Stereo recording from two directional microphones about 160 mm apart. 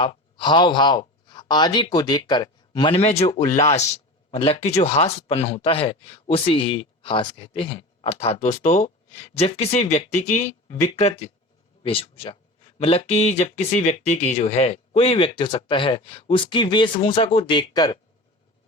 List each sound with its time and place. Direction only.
0.0 s speech: 30° left (ahead or behind)